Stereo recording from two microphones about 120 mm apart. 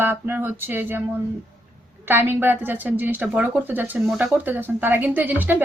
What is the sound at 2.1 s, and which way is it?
A woman's voice, 15° right (ahead or behind).